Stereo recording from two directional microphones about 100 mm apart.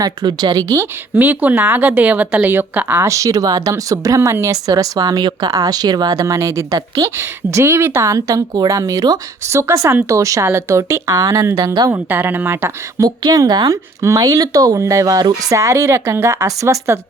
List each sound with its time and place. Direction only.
0.0 s speech: 45° right (ahead or behind)
1.1 s speech: 15° right (ahead or behind); by 11.9 s 40° right (ahead or behind)
11.9 s speech: 20° right (ahead or behind)
13.0 s speech: 40° right (ahead or behind)